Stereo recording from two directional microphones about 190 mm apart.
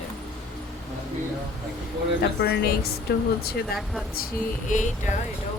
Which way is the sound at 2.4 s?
60° left (ahead or behind).